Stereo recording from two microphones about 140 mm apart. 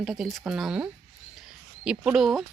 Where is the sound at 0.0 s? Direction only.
Centre (ahead or behind).